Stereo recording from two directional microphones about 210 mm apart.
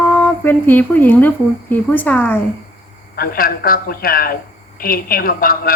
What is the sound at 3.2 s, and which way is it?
A woman's voice, 45° left (ahead or behind).